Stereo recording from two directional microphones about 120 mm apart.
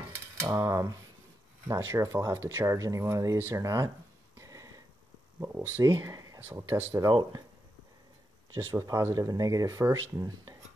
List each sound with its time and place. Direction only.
0.1 s cutlery: 25° right (ahead or behind)
1.7 s speech: 25° right (ahead or behind)
4.4 s a sound: 30° right (ahead or behind)
5.4 s speech: 20° right (ahead or behind)
6.4 s speech: 20° right (ahead or behind)
8.5 s speech: 25° right (ahead or behind)